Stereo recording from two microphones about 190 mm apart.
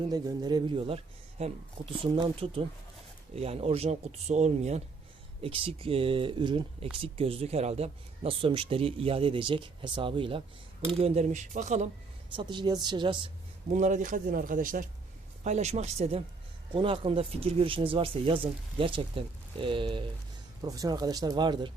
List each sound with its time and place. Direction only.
0.1 s speech: 20° right (ahead or behind); by 11.9 s 40° right (ahead or behind)
12.4 s speech: 25° right (ahead or behind)
13.7 s speech: 40° right (ahead or behind); by 21.7 s 25° right (ahead or behind)